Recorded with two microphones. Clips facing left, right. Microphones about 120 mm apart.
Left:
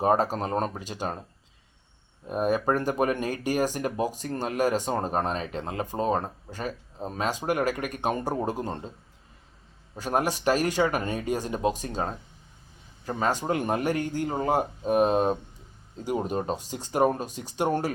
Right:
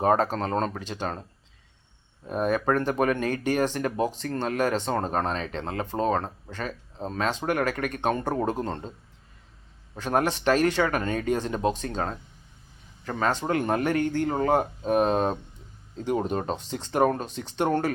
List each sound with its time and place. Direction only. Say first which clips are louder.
0.1 s speech: right 1 dB; 10° left (ahead or behind)
2.2 s speech: even; 10° left (ahead or behind)
10.0 s speech: right 1 dB; 10° left (ahead or behind)